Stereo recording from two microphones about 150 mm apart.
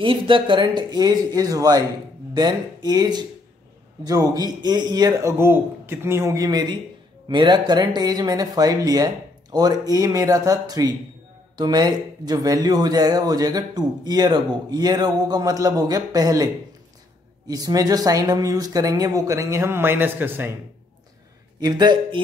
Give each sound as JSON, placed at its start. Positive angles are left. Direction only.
{"t": 0.0, "sound": "speech", "side_deg": -35}
{"t": 17.5, "sound": "speech", "side_deg": -25}
{"t": 21.5, "sound": "speech", "side_deg": -30}